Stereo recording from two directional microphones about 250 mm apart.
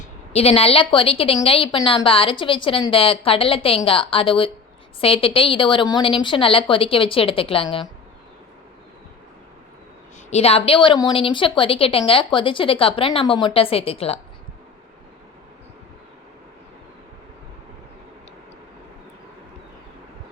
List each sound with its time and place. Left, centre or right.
0.0 s a woman's voice: left
10.2 s a woman's voice: left